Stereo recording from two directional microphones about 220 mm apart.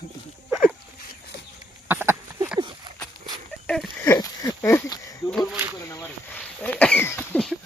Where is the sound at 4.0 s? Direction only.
15° left (ahead or behind).